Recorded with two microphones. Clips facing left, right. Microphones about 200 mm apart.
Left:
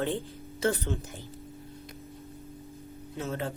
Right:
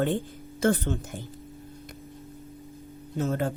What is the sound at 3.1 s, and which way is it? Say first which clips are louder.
Speech: right 6 dB; 45° right (ahead or behind).